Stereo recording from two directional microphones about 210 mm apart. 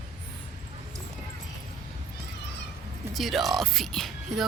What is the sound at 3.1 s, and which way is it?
Speech, centre (ahead or behind).